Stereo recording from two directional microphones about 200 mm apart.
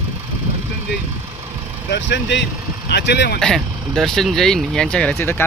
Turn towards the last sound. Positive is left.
turn(degrees=10)  # may be behind; listen again after turning